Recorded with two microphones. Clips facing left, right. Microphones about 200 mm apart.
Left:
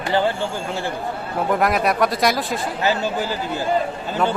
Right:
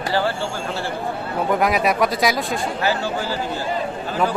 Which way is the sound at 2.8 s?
20° left (ahead or behind).